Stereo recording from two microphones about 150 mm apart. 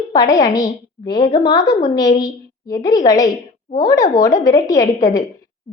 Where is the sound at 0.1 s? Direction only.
25° left (ahead or behind).